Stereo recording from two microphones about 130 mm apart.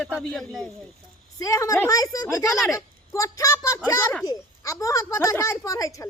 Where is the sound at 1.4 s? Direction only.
25° left (ahead or behind).